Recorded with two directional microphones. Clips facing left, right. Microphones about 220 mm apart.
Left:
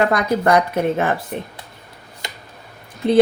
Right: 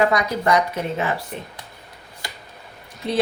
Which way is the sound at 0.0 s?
55° left (ahead or behind).